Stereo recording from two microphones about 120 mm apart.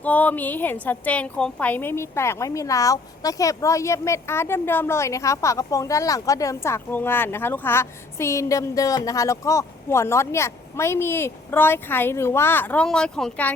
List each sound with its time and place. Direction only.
0.0 s a woman's voice: 15° left (ahead or behind)